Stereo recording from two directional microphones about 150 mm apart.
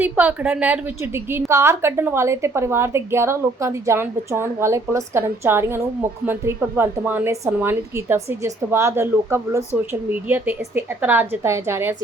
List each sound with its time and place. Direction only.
0.0 s a woman's voice: 10° right (ahead or behind)